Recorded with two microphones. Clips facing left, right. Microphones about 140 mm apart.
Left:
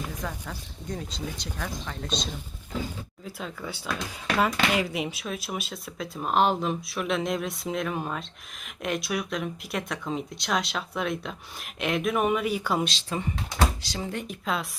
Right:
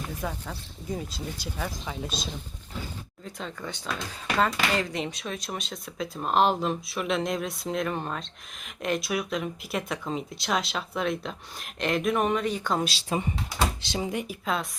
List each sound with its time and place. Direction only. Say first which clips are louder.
0.2 s speech: right 1 dB; 10° right (ahead or behind)
3.2 s speech: even; 5° left (ahead or behind)
13.1 s speech: right 2 dB; 20° right (ahead or behind)
14.4 s speech: left 1 dB; centre (ahead or behind)